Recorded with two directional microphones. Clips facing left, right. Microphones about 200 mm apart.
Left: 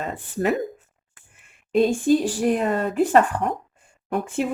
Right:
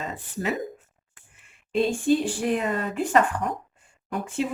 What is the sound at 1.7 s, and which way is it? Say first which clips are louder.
Speech: left 4 dB; 40° left (ahead or behind).